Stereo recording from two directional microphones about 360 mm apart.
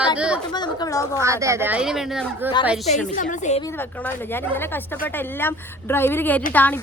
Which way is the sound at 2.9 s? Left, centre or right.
Centre.